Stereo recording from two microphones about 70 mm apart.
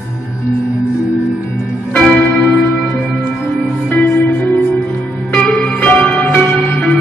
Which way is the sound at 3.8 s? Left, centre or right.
Left.